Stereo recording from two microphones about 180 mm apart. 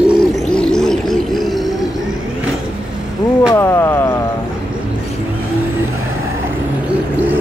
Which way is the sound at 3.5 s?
15° left (ahead or behind).